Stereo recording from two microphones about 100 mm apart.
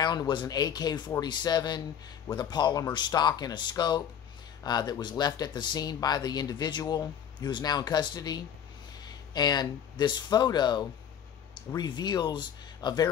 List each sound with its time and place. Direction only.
0.0 s speech: 45° left (ahead or behind)